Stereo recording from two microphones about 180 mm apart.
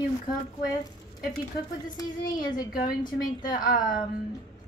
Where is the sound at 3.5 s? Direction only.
50° left (ahead or behind).